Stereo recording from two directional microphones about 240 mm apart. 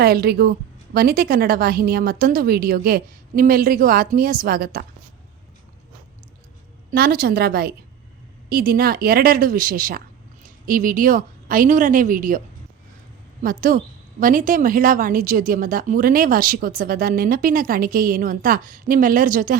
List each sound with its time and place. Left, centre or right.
0.0 s a woman's voice: right
6.9 s a woman's voice: right
13.4 s a woman's voice: right